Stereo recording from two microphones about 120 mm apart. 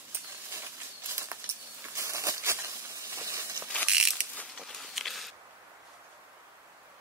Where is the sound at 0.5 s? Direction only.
25° right (ahead or behind).